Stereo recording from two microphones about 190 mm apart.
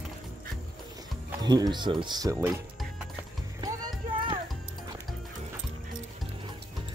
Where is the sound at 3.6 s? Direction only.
20° right (ahead or behind).